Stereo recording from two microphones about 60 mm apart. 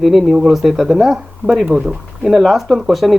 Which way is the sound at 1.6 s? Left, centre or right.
Centre.